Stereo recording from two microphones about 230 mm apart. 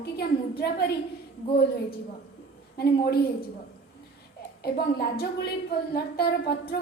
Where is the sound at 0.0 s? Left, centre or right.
Left.